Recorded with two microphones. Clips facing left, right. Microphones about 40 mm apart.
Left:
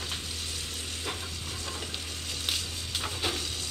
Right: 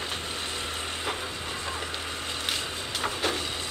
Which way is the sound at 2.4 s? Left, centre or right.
Right.